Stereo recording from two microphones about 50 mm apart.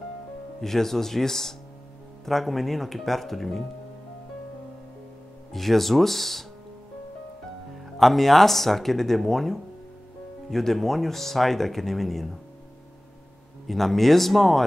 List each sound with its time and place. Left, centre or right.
0.6 s speech: centre
5.5 s speech: centre
7.8 s speech: centre
13.7 s speech: centre